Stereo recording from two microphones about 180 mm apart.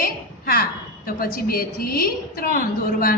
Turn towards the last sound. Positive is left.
turn(degrees=55)  # may be behind; listen again after turning